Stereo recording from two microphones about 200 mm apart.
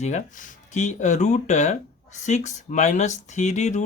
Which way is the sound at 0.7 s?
35° left (ahead or behind).